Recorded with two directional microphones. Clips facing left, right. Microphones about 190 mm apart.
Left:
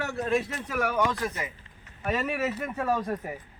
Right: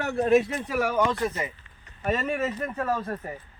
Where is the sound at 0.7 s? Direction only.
Centre (ahead or behind).